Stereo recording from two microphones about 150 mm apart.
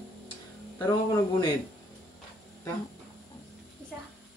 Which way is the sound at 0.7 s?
30° left (ahead or behind).